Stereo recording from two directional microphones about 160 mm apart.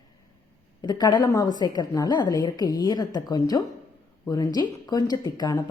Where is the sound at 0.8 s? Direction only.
25° left (ahead or behind).